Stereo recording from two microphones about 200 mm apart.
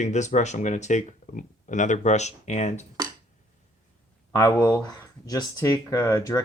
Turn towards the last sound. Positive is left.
turn(degrees=15)  # may be behind; listen again after turning